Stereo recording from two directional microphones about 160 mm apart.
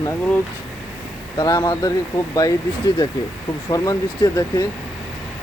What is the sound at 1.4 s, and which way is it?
Speech, 25° left (ahead or behind).